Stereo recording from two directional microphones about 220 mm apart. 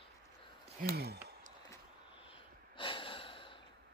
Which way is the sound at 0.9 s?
45° right (ahead or behind).